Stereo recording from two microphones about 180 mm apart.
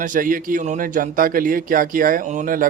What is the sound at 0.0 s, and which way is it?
Speech, 50° right (ahead or behind).